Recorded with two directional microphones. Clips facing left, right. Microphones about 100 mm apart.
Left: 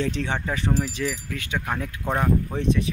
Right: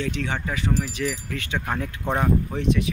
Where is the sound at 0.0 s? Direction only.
25° left (ahead or behind).